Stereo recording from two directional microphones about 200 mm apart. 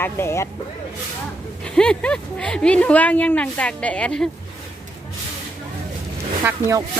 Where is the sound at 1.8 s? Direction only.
5° left (ahead or behind).